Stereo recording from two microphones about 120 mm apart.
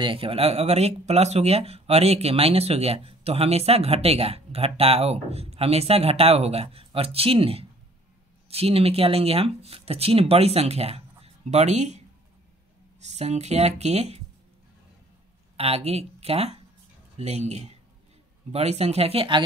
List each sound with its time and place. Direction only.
0.0 s speech: 50° right (ahead or behind); by 12.0 s 70° right (ahead or behind)
13.0 s speech: 70° right (ahead or behind)
15.5 s speech: 55° right (ahead or behind)